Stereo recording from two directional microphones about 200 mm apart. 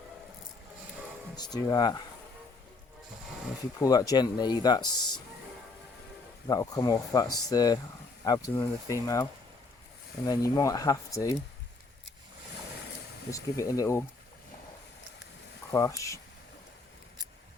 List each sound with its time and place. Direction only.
1.4 s speech: 20° left (ahead or behind)
3.8 s speech: 20° left (ahead or behind)
6.5 s speech: 15° left (ahead or behind)
10.5 s speech: 15° left (ahead or behind)
13.3 s speech: 15° left (ahead or behind)
15.7 s speech: 15° left (ahead or behind)